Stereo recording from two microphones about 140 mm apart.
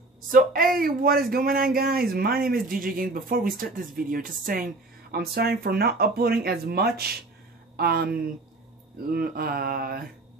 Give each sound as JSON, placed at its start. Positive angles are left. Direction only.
{"t": 0.3, "sound": "speech", "side_deg": -90}